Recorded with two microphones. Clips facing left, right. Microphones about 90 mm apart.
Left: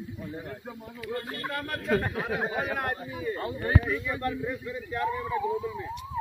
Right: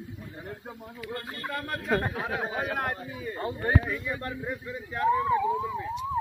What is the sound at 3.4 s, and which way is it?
Speech, 30° right (ahead or behind).